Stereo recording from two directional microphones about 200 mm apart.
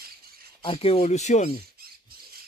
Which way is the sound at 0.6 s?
25° left (ahead or behind).